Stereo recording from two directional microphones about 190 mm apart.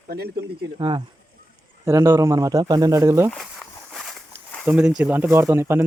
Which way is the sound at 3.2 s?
Centre (ahead or behind).